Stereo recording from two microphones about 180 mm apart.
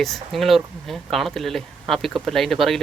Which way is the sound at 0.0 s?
Centre (ahead or behind).